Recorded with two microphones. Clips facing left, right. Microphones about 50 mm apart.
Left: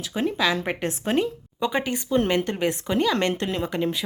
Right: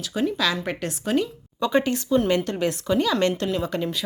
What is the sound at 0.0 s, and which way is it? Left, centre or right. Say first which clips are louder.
Speech: even; left.